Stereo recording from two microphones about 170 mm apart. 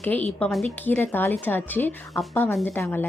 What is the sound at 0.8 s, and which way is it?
Speech, 10° left (ahead or behind).